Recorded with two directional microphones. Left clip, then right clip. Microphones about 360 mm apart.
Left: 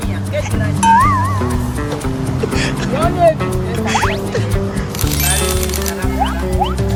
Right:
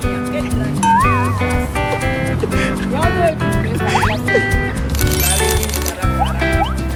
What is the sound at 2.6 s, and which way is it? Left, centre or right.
Music, centre.